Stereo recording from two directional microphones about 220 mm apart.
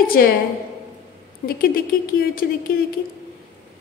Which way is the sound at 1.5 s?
45° left (ahead or behind).